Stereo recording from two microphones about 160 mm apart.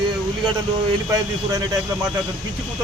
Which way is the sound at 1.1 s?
25° right (ahead or behind).